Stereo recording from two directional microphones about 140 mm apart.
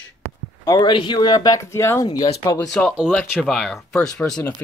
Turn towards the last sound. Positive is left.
turn(degrees=5)  # may be behind; listen again after turning